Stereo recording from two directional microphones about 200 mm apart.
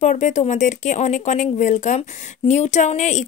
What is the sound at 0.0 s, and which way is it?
Speech, 35° left (ahead or behind).